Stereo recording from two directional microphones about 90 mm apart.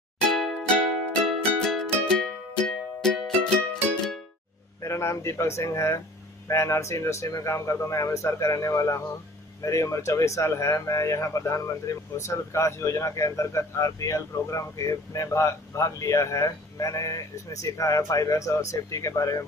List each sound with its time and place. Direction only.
0.2 s music: 5° left (ahead or behind)
4.8 s speech: 35° left (ahead or behind)